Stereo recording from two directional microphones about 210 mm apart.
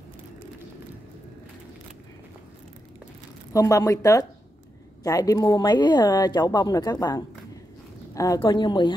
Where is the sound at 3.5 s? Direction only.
15° left (ahead or behind).